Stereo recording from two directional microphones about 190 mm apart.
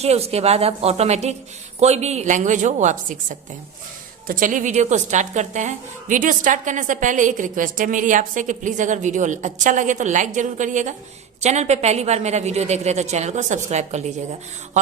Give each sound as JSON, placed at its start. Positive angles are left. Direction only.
{"t": 0.0, "sound": "a woman's voice", "side_deg": -35}